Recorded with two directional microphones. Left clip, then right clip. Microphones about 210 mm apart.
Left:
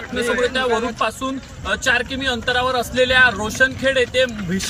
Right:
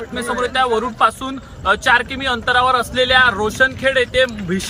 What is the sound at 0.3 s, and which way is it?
A man's voice, 25° right (ahead or behind).